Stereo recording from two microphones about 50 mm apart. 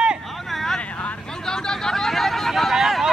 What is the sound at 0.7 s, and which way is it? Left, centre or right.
Vehicle, left.